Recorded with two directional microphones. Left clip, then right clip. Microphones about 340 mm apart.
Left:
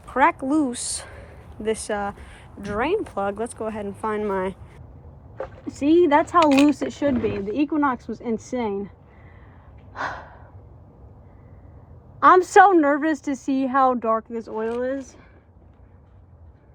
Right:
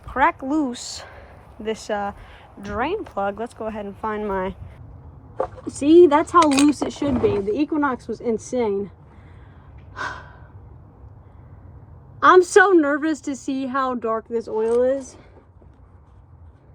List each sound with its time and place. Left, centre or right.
0.1 s speech: centre
5.8 s a woman's voice: centre
9.9 s gasp: centre
12.2 s a woman's voice: centre